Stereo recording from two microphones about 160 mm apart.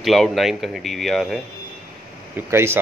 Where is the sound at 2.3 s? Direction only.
15° right (ahead or behind).